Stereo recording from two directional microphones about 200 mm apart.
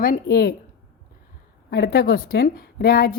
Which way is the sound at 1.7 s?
55° left (ahead or behind).